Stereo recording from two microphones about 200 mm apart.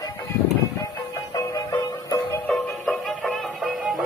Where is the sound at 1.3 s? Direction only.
15° left (ahead or behind).